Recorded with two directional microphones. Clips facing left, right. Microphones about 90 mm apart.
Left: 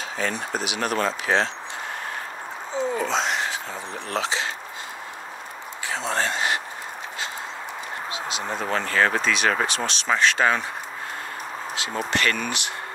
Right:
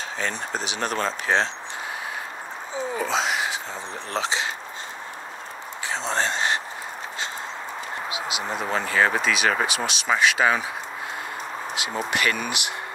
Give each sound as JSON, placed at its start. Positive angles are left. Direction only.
{"t": 0.2, "sound": "speech", "side_deg": -30}
{"t": 2.7, "sound": "speech", "side_deg": -5}
{"t": 4.1, "sound": "speech", "side_deg": -25}
{"t": 5.9, "sound": "a sound", "side_deg": -25}
{"t": 8.1, "sound": "speech", "side_deg": -10}
{"t": 11.7, "sound": "speech", "side_deg": -15}